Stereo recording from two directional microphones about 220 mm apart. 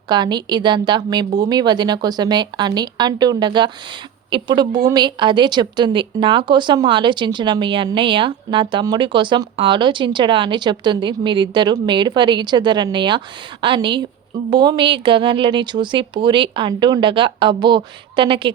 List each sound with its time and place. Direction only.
0.1 s a woman's voice: 20° right (ahead or behind)